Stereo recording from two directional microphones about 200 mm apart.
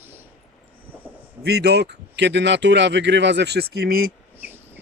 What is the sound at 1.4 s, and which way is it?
Speech, 55° right (ahead or behind).